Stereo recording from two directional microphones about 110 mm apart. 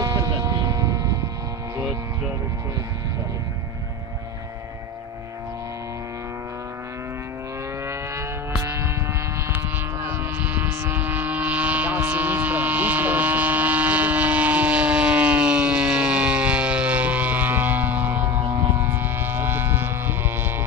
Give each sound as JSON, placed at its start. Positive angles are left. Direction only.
{"t": 0.0, "sound": "vehicle", "side_deg": -30}
{"t": 7.8, "sound": "vehicle", "side_deg": -25}
{"t": 10.0, "sound": "vehicle", "side_deg": -15}